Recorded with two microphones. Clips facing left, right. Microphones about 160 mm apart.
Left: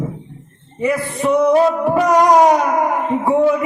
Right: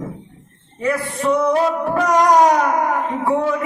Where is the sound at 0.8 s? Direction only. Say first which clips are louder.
Left 2 dB; 15° left (ahead or behind).